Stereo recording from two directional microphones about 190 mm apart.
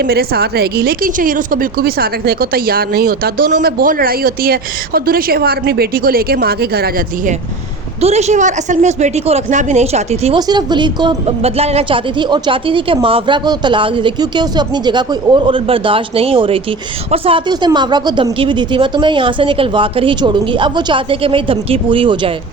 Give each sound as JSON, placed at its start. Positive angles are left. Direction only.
{"t": 0.0, "sound": "a woman's voice", "side_deg": -55}
{"t": 8.0, "sound": "a woman's voice", "side_deg": -35}
{"t": 10.3, "sound": "a woman's voice", "side_deg": -20}